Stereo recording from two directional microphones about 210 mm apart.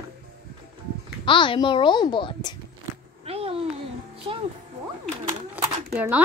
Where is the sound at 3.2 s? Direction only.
25° right (ahead or behind).